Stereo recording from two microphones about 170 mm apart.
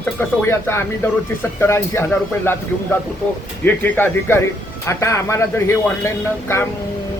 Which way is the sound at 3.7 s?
10° left (ahead or behind).